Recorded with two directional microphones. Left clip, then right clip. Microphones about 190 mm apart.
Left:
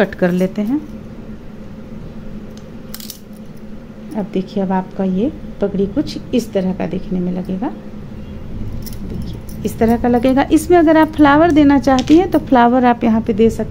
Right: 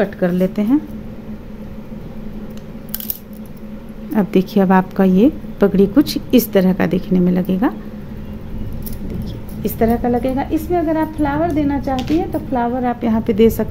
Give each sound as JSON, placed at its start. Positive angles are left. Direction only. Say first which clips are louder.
{"t": 0.0, "sound": "a woman's voice", "louder": "left 2 dB", "side_deg": 10}
{"t": 4.1, "sound": "a woman's voice", "louder": "right 5 dB", "side_deg": -30}
{"t": 9.2, "sound": "keys jangling", "louder": "even", "side_deg": 0}
{"t": 9.8, "sound": "a woman's voice", "louder": "left 3 dB", "side_deg": 20}
{"t": 10.2, "sound": "speech", "louder": "left 6 dB", "side_deg": 40}
{"t": 13.2, "sound": "a woman's voice", "louder": "right 1 dB", "side_deg": -5}